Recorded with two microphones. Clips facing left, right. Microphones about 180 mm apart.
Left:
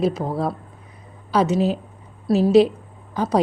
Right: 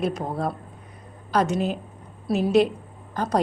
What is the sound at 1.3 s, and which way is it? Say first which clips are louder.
Speech: left 3 dB; 5° left (ahead or behind).